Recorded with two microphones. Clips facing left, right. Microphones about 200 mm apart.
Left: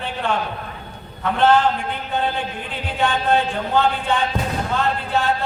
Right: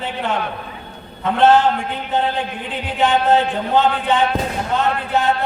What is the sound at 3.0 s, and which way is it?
A man's voice, 20° right (ahead or behind).